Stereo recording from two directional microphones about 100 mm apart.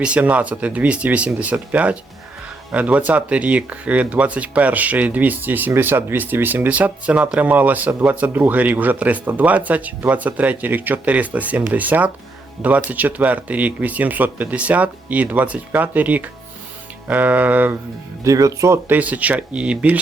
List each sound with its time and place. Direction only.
0.0 s speech: 10° right (ahead or behind)
18.2 s speech: 35° right (ahead or behind)
18.9 s speech: 15° right (ahead or behind)